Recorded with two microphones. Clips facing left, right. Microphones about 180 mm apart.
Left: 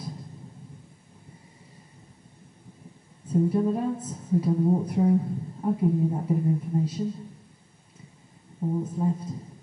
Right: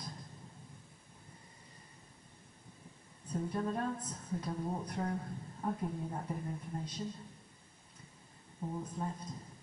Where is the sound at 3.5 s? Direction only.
10° left (ahead or behind).